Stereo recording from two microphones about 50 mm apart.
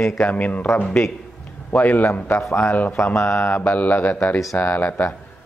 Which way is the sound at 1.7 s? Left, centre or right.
Left.